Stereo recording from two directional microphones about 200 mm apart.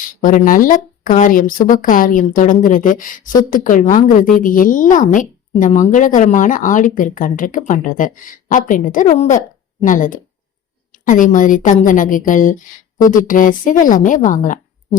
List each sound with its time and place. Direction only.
0.0 s a woman's voice: 40° left (ahead or behind)